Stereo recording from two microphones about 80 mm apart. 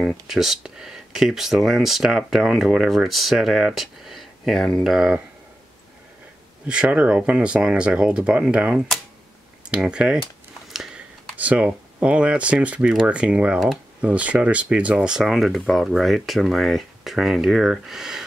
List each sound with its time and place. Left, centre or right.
0.3 s speech: centre
6.7 s speech: centre
10.7 s a sound: centre
11.3 s speech: centre